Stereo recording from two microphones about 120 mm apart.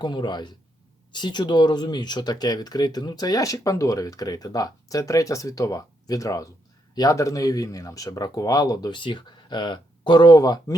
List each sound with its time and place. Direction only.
0.0 s speech: 40° left (ahead or behind)